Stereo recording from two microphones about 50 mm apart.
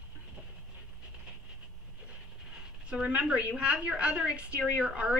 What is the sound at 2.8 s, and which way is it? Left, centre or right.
A woman's voice, right.